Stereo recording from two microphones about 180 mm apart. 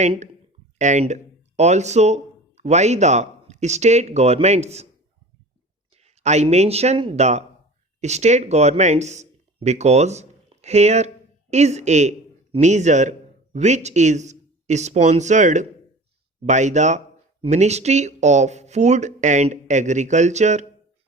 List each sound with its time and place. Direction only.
0.0 s speech: 40° right (ahead or behind)
6.0 s a man's voice: 40° right (ahead or behind)